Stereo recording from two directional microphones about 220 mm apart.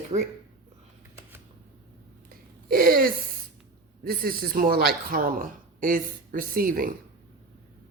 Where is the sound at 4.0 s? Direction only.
40° right (ahead or behind).